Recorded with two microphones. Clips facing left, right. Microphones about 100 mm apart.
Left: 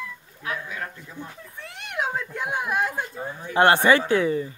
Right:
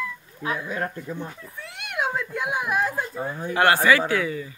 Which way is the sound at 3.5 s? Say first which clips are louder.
Left 2 dB; 20° left (ahead or behind).